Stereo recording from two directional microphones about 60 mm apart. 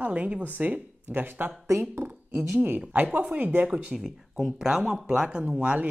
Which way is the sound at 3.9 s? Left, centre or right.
Centre.